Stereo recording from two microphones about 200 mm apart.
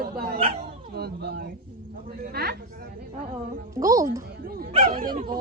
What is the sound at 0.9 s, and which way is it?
A woman's voice, 50° right (ahead or behind).